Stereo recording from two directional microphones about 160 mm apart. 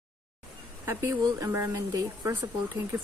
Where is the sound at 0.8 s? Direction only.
15° right (ahead or behind).